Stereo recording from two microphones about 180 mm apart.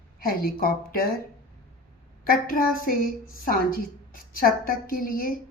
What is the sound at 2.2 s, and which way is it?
A woman's voice, 50° left (ahead or behind).